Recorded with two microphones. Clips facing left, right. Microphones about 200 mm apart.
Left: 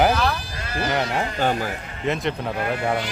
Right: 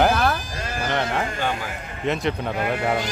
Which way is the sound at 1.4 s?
45° left (ahead or behind).